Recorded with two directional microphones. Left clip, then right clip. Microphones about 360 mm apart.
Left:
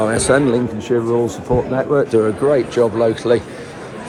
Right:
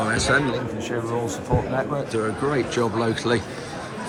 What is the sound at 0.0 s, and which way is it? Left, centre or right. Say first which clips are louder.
Speech: left 6 dB; centre.